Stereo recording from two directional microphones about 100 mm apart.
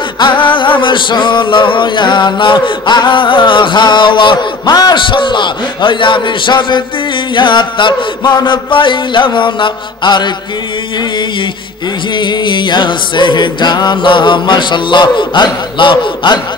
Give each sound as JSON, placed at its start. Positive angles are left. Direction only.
{"t": 0.2, "sound": "music", "side_deg": 50}
{"t": 12.2, "sound": "music", "side_deg": 50}